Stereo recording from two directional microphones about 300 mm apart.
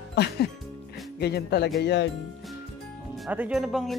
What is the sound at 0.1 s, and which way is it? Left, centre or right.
Speech, left.